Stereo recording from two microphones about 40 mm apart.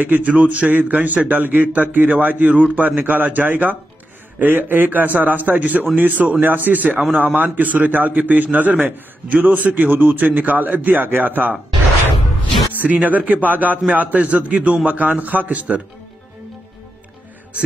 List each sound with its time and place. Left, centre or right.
0.0 s a man's voice: right
3.0 s a man's voice: right
4.4 s a man's voice: right
9.8 s a man's voice: right
12.7 s a man's voice: right